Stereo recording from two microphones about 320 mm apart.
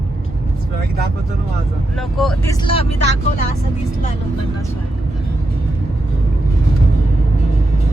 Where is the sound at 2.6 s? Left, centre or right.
Centre.